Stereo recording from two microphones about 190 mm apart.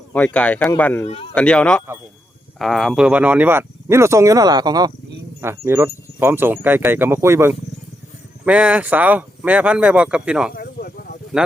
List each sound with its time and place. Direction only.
0.3 s speech: 5° left (ahead or behind)
1.0 s speech: 30° left (ahead or behind)
1.4 s speech: 5° left (ahead or behind)
10.5 s a sound: 55° left (ahead or behind)
11.3 s speech: 5° right (ahead or behind)